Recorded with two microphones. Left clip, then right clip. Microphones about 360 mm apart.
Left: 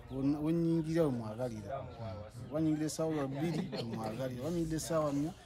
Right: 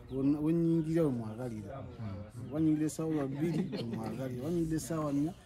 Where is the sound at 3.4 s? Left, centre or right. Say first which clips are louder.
Right 2 dB; left.